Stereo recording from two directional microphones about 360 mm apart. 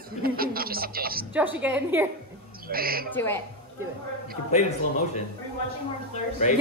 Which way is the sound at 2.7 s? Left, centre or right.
Right.